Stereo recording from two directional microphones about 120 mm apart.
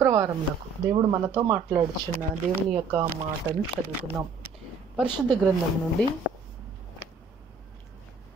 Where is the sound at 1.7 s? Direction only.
15° right (ahead or behind).